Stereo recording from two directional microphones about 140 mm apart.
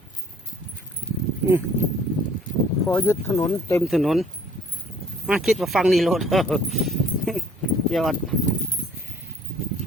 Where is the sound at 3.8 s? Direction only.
Centre (ahead or behind).